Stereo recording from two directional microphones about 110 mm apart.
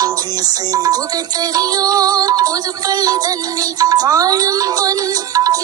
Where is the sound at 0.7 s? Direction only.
35° right (ahead or behind).